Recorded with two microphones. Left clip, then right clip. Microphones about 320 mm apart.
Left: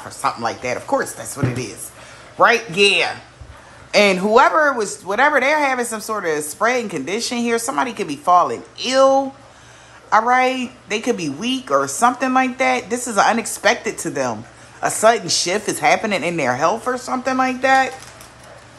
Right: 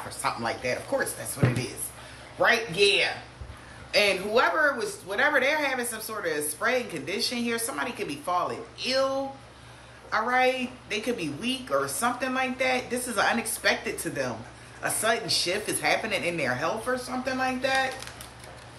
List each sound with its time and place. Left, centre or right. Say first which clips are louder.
0.2 s a woman's voice: left 8 dB; centre